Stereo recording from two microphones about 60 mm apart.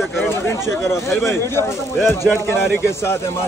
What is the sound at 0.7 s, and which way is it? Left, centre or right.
A man's voice, left.